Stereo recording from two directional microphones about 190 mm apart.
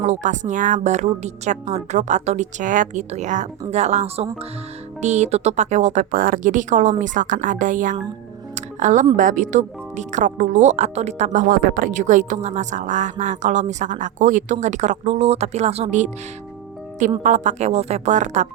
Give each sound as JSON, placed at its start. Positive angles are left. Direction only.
{"t": 0.0, "sound": "speech", "side_deg": -40}
{"t": 8.5, "sound": "music", "side_deg": -40}
{"t": 9.1, "sound": "speech", "side_deg": -40}
{"t": 17.2, "sound": "speech", "side_deg": -40}